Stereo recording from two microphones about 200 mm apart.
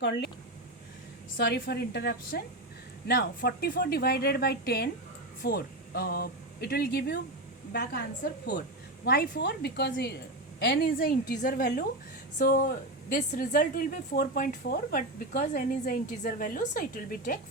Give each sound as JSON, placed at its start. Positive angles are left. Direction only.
{"t": 1.4, "sound": "a woman's voice", "side_deg": 55}